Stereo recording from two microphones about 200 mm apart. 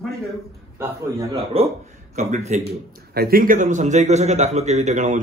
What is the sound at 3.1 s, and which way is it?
A man's voice, 50° right (ahead or behind).